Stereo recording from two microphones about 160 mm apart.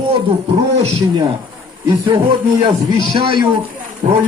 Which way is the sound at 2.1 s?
30° right (ahead or behind).